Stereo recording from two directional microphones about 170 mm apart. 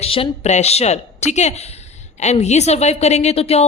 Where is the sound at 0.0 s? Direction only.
35° left (ahead or behind).